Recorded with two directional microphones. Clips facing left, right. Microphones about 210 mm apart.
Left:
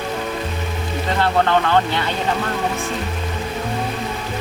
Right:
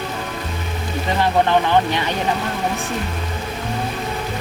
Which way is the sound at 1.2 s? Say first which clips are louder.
Right 1 dB; 15° right (ahead or behind).